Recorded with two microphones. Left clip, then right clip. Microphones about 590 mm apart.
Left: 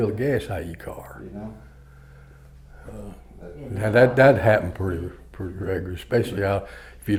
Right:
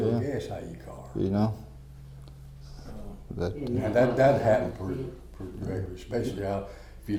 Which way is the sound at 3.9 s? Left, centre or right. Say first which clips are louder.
Left 7 dB; left.